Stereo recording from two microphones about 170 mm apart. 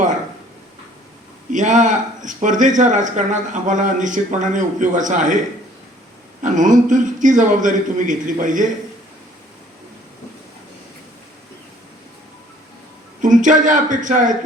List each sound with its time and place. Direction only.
1.5 s speech: 45° right (ahead or behind)
6.4 s speech: 50° right (ahead or behind)
13.2 s speech: 50° right (ahead or behind)